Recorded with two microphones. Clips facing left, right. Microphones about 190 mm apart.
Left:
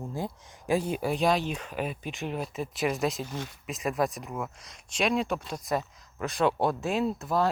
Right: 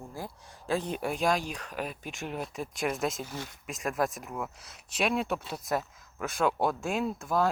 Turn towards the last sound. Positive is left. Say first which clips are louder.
# left 2 dB
turn(degrees=0)  # may be behind; listen again after turning